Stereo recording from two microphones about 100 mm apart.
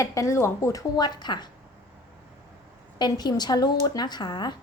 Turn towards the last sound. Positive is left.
turn(degrees=45)  # may be behind; listen again after turning